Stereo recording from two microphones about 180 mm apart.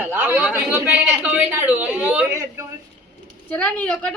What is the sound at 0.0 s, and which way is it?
A man's voice, 10° right (ahead or behind).